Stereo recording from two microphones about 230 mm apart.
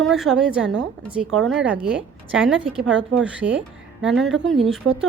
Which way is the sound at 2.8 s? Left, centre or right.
Right.